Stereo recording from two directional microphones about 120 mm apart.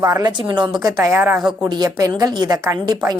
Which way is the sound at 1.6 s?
35° right (ahead or behind).